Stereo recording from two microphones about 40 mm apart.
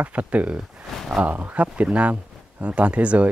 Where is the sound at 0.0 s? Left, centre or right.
Right.